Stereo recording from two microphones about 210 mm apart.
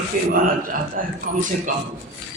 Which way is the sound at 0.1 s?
40° right (ahead or behind).